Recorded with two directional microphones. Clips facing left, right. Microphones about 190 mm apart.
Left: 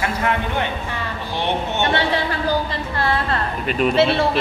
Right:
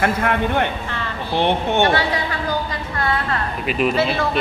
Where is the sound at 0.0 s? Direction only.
55° right (ahead or behind).